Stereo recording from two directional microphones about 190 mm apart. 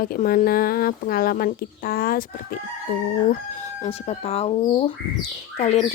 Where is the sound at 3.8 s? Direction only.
35° left (ahead or behind).